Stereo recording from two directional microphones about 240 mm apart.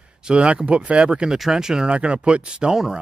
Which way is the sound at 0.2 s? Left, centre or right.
Centre.